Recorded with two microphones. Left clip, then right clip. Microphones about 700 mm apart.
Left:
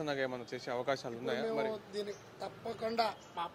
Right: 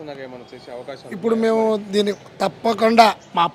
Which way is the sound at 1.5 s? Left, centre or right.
Right.